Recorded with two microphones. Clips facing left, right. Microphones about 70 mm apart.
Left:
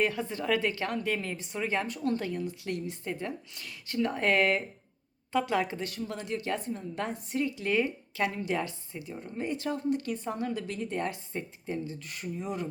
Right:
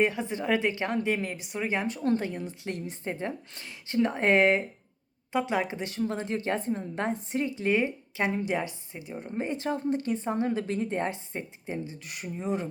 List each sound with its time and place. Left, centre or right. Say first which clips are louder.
0.0 s a woman's voice: right 3 dB; right